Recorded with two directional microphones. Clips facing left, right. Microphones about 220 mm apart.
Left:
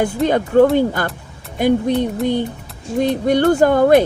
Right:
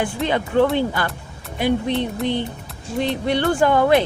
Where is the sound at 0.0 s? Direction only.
45° left (ahead or behind).